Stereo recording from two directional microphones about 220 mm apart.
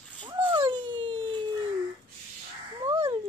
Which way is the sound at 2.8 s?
25° right (ahead or behind).